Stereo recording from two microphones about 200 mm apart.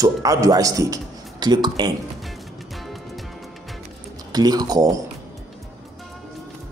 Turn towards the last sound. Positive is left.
turn(degrees=-20)  # may be behind; listen again after turning